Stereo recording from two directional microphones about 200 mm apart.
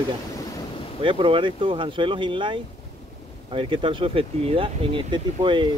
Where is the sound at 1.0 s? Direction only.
25° right (ahead or behind).